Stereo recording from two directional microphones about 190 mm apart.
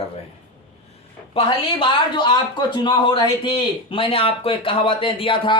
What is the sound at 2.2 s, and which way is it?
A man's voice, 25° left (ahead or behind).